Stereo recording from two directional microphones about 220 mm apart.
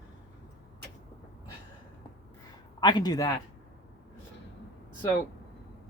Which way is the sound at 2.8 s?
20° left (ahead or behind).